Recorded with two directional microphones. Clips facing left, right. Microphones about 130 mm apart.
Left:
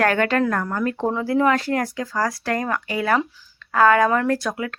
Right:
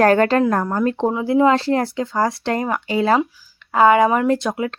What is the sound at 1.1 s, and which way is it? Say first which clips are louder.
Speech: right 3 dB; 20° right (ahead or behind).